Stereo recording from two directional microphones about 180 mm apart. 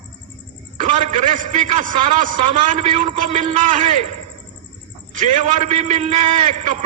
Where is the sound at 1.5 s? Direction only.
40° right (ahead or behind).